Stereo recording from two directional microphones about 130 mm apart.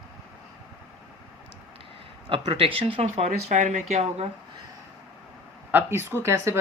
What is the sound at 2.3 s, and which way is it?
Speech, 45° right (ahead or behind).